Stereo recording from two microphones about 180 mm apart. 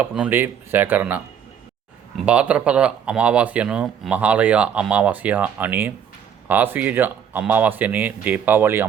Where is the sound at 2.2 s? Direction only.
5° right (ahead or behind).